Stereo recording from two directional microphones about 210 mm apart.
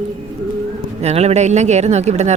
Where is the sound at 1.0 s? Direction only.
30° right (ahead or behind).